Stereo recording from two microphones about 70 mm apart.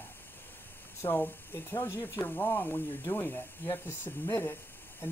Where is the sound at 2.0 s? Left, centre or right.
Left.